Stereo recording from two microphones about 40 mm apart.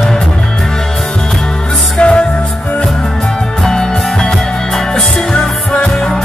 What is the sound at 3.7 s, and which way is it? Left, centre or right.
Music, centre.